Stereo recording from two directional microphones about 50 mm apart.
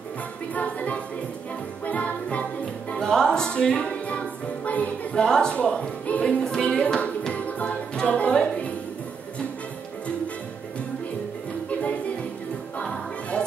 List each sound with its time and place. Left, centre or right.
0.6 s music: left
3.0 s music: centre
5.2 s speech: centre
5.6 s music: left
6.8 s music: left
12.8 s music: centre